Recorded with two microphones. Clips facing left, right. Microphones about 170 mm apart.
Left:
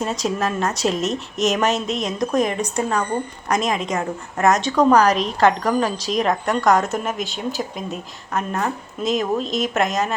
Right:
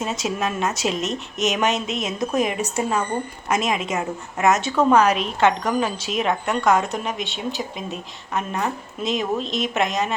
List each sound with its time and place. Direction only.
0.0 s speech: centre (ahead or behind)
4.9 s a woman's voice: 35° left (ahead or behind)
5.2 s speech: centre (ahead or behind)